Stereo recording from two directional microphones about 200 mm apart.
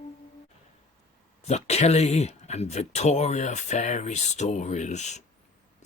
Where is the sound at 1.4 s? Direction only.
35° left (ahead or behind).